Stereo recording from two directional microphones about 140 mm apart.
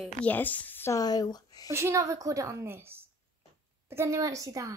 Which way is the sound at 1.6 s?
20° right (ahead or behind).